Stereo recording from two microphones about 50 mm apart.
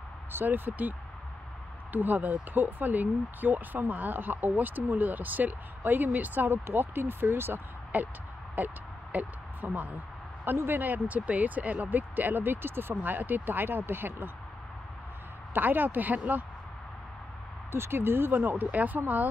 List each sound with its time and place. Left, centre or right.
0.3 s speech: right
7.9 s speech: right
10.4 s speech: right
15.5 s speech: right
17.6 s speech: right